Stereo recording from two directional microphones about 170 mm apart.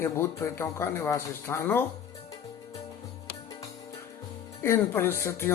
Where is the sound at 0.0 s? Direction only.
15° left (ahead or behind).